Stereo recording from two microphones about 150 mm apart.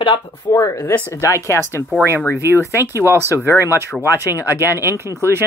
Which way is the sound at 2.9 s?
15° right (ahead or behind).